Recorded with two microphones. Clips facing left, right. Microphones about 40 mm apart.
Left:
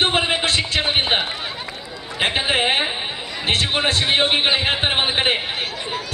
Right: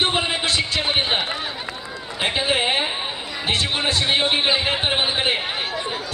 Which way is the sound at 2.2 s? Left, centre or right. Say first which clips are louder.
Left 2 dB; left.